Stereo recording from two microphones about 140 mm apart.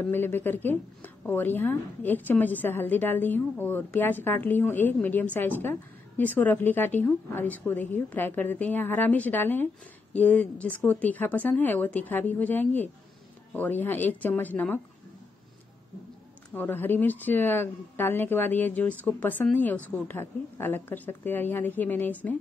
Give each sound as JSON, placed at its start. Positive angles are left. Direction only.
{"t": 0.0, "sound": "a woman's voice", "side_deg": 15}
{"t": 16.5, "sound": "a woman's voice", "side_deg": 15}